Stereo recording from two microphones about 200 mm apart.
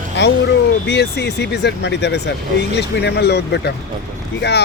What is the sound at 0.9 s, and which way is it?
Speech, 55° left (ahead or behind).